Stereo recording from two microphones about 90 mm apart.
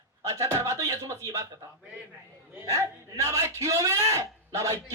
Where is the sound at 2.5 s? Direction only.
30° right (ahead or behind).